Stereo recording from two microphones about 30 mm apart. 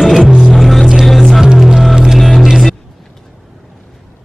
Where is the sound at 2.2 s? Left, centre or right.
Centre.